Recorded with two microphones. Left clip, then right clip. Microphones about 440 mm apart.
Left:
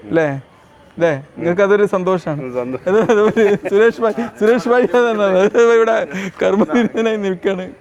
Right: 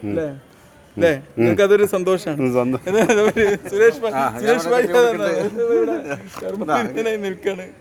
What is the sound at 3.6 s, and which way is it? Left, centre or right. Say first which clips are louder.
Speech: left 3 dB; left.